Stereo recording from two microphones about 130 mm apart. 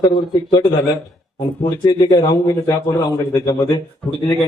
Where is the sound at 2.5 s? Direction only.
20° left (ahead or behind).